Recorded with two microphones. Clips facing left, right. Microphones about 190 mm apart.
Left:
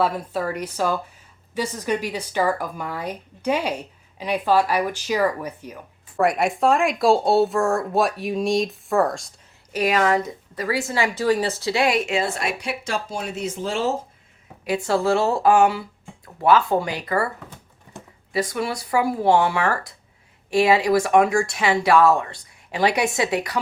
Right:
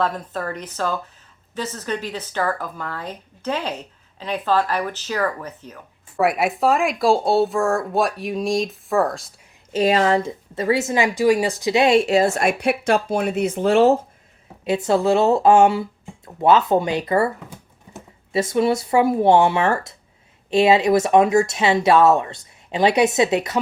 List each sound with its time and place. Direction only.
0.0 s speech: 10° left (ahead or behind)
6.1 s speech: 5° right (ahead or behind)
9.7 s a woman's voice: 25° right (ahead or behind); by 13.9 s 60° right (ahead or behind)
14.6 s a woman's voice: 20° right (ahead or behind)
18.3 s a woman's voice: 25° right (ahead or behind)